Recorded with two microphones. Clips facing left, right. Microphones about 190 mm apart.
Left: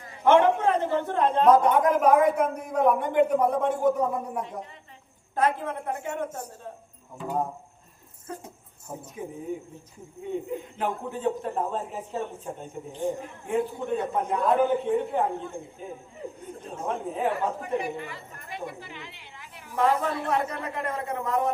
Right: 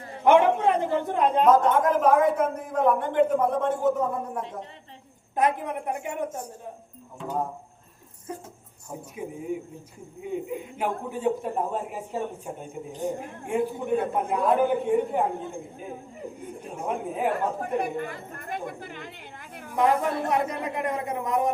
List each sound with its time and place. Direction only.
0.3 s a man's voice: 15° right (ahead or behind)
1.5 s a man's voice: 10° left (ahead or behind)
5.4 s a man's voice: 15° right (ahead or behind)
7.2 s speech: 5° left (ahead or behind)
8.3 s a man's voice: 15° right (ahead or behind)
10.5 s a man's voice: 10° right (ahead or behind)
12.9 s a woman's voice: 40° right (ahead or behind)
13.5 s a man's voice: 10° right (ahead or behind)
16.6 s a man's voice: 10° right (ahead or behind)
17.6 s a woman's voice: 50° right (ahead or behind)
19.7 s a man's voice: 15° right (ahead or behind)